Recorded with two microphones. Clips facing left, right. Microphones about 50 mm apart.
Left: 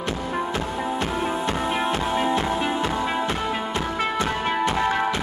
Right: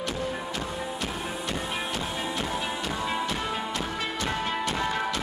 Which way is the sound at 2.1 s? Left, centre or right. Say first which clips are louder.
Left 8 dB; left.